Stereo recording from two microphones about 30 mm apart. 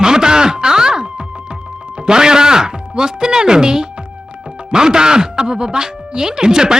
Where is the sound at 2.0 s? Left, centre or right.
Right.